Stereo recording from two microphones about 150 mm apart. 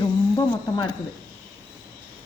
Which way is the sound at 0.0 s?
25° left (ahead or behind).